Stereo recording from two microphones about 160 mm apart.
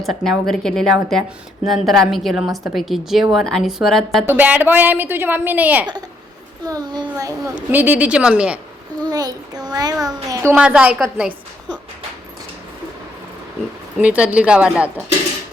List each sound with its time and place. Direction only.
0.0 s a woman's voice: centre (ahead or behind)
4.3 s a child's voice: 10° right (ahead or behind)
6.7 s a child's voice: 25° right (ahead or behind); by 8.5 s 5° right (ahead or behind)
9.0 s a child's voice: 25° right (ahead or behind)
10.5 s a child's voice: 10° right (ahead or behind)
14.0 s a child's voice: 10° right (ahead or behind)